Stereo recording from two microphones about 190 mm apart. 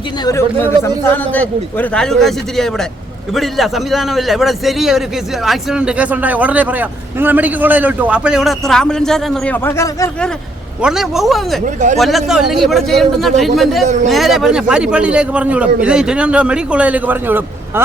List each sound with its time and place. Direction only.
0.3 s a man's voice: 15° left (ahead or behind)
10.8 s a man's voice: 5° right (ahead or behind)
11.6 s speech: 40° right (ahead or behind)
11.9 s a man's voice: centre (ahead or behind)
13.8 s speech: 40° right (ahead or behind)
14.1 s a man's voice: centre (ahead or behind)